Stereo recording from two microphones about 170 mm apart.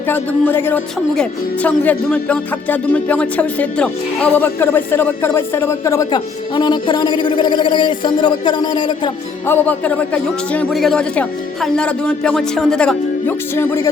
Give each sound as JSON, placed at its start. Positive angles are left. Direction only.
{"t": 0.1, "sound": "music", "side_deg": 10}
{"t": 9.5, "sound": "music", "side_deg": 10}